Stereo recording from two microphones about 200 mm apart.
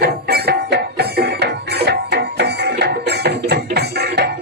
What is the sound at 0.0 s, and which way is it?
Music, 55° right (ahead or behind).